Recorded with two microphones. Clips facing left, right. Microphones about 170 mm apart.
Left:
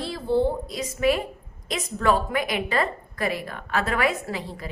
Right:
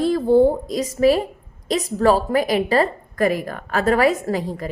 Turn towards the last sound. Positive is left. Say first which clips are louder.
# right 8 dB
turn(degrees=-45)  # may be behind; listen again after turning